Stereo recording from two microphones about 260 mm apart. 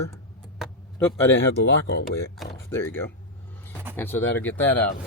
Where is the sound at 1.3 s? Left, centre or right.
Left.